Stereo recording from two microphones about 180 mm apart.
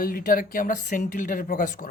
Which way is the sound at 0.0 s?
55° left (ahead or behind).